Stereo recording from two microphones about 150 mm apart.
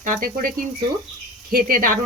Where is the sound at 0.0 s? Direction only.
65° right (ahead or behind).